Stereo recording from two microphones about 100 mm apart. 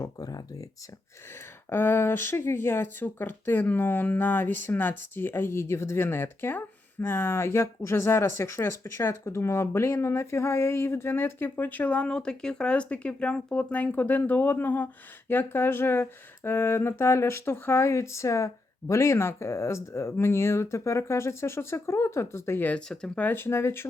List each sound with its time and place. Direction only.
0.0 s speech: 40° left (ahead or behind)
1.7 s speech: 20° left (ahead or behind)
22.9 s speech: 10° left (ahead or behind); by 23.9 s 25° left (ahead or behind)